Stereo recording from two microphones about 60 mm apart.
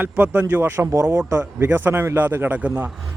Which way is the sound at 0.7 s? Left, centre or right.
Right.